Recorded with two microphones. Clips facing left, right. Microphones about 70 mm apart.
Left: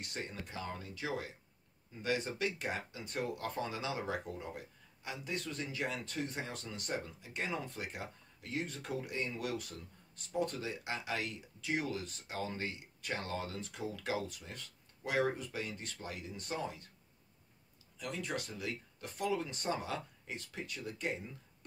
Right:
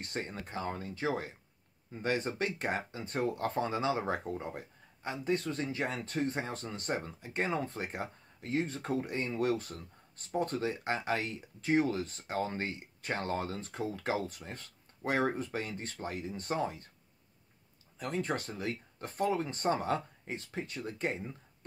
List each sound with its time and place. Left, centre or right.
0.0 s speech: right
17.9 s speech: right